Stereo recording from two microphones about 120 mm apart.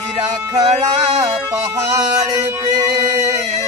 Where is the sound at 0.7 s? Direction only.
65° right (ahead or behind).